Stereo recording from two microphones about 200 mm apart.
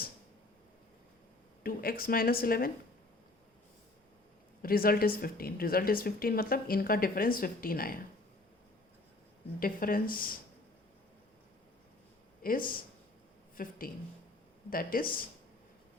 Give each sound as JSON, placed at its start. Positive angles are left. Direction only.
{"t": 1.6, "sound": "a woman's voice", "side_deg": 45}
{"t": 4.6, "sound": "a woman's voice", "side_deg": 45}
{"t": 9.6, "sound": "a woman's voice", "side_deg": 45}
{"t": 12.4, "sound": "a woman's voice", "side_deg": 45}